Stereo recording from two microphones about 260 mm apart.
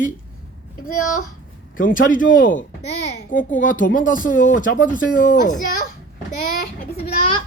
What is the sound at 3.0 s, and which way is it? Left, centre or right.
Speech, left.